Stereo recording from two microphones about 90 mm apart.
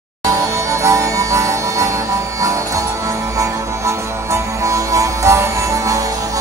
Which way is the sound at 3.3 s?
35° right (ahead or behind).